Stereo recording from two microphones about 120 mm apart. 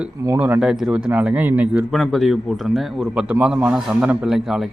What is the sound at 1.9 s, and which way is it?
A man's voice, centre (ahead or behind).